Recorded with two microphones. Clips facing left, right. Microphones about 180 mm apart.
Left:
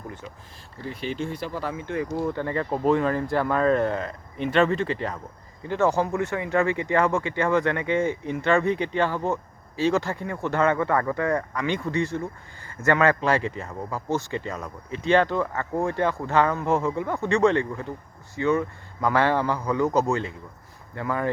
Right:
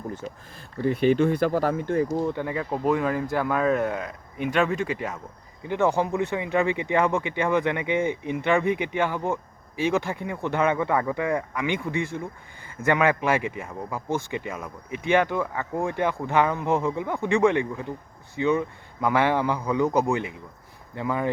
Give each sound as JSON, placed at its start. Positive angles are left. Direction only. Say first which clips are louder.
{"t": 0.8, "sound": "speech", "louder": "right 10 dB", "side_deg": -55}
{"t": 2.0, "sound": "speech", "louder": "right 1 dB", "side_deg": -15}
{"t": 5.6, "sound": "speech", "louder": "even", "side_deg": -15}